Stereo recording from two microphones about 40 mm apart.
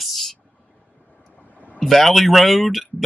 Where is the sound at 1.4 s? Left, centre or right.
Left.